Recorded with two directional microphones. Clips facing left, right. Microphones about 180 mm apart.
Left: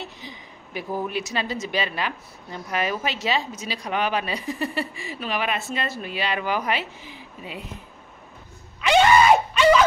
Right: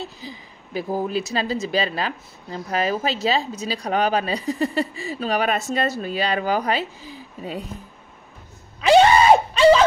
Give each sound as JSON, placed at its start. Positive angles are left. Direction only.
{"t": 0.2, "sound": "speech", "side_deg": -35}
{"t": 8.8, "sound": "screaming", "side_deg": -35}